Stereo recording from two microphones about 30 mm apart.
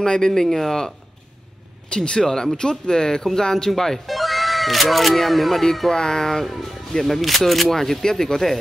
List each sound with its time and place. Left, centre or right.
0.0 s speech: left
1.9 s speech: left
4.1 s speech: centre
6.4 s speech: centre